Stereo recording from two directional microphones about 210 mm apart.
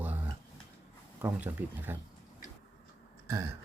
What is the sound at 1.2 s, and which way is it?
Speech, 10° right (ahead or behind).